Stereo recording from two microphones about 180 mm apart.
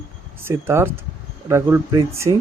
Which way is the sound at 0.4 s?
15° right (ahead or behind).